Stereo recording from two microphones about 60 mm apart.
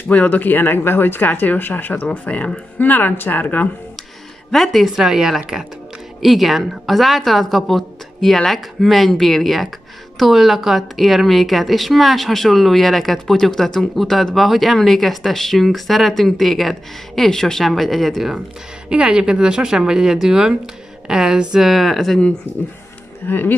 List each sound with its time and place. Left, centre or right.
0.1 s speech: left
2.0 s speech: left
4.5 s speech: centre
4.9 s speech: centre
18.9 s speech: centre
23.2 s speech: left